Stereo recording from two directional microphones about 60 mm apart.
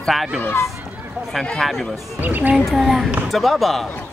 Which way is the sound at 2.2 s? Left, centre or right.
Right.